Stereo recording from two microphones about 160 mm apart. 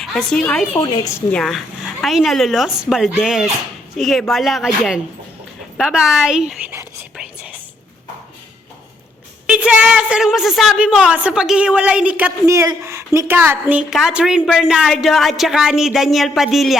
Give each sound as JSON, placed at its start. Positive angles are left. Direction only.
{"t": 0.0, "sound": "speech", "side_deg": 5}
{"t": 0.8, "sound": "a woman's voice", "side_deg": 30}
{"t": 1.3, "sound": "a woman's voice", "side_deg": 5}
{"t": 9.5, "sound": "a woman's voice", "side_deg": -10}